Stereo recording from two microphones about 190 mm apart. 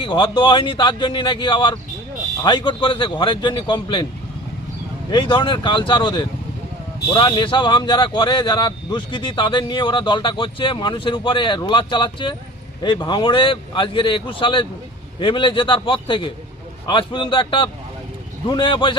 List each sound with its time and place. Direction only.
0.0 s speech: 25° left (ahead or behind)
5.1 s speech: 25° left (ahead or behind)